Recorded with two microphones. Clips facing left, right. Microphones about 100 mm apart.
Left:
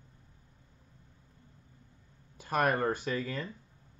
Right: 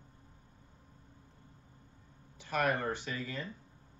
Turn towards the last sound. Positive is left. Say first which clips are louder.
# left 5 dB
turn(degrees=45)  # may be behind; listen again after turning